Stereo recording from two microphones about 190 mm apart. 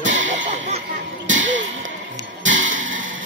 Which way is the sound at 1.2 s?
75° right (ahead or behind).